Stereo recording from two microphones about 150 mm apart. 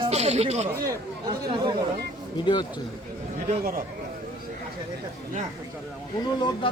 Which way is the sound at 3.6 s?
80° right.